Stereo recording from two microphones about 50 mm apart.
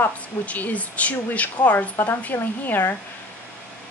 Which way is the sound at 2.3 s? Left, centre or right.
Left.